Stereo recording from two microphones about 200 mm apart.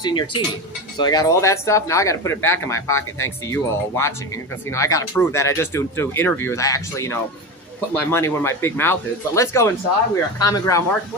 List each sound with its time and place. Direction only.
0.0 s speech: 25° left (ahead or behind)